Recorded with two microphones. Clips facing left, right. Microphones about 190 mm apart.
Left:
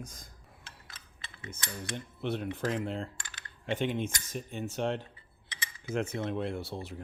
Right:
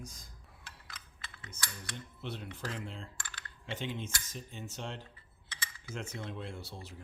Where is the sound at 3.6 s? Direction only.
60° left (ahead or behind).